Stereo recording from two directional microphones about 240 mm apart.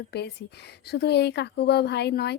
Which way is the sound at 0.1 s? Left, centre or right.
Left.